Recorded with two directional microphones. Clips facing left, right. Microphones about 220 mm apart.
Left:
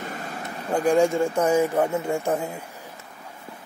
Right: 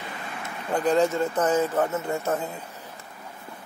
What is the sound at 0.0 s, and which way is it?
Vehicle, 45° left (ahead or behind).